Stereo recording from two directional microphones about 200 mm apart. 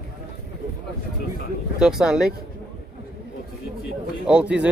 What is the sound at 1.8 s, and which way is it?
Speech, 5° right (ahead or behind).